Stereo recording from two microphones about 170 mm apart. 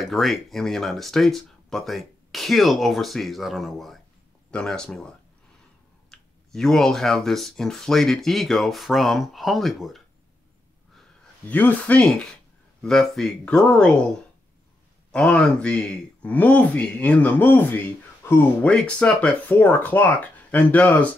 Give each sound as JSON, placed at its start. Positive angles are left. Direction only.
{"t": 0.0, "sound": "speech", "side_deg": 0}
{"t": 11.4, "sound": "speech", "side_deg": 10}
{"t": 15.0, "sound": "speech", "side_deg": 5}